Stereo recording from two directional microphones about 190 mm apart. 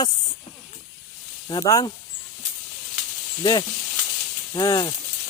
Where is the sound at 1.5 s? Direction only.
20° left (ahead or behind).